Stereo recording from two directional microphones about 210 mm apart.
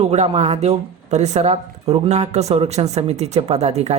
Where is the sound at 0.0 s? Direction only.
30° right (ahead or behind).